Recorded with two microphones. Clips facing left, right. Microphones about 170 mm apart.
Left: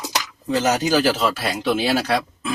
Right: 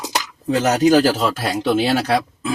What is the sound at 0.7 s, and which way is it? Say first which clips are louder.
Speech: right 5 dB; 55° right (ahead or behind).